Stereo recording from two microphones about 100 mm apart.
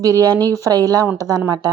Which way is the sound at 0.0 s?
35° right (ahead or behind).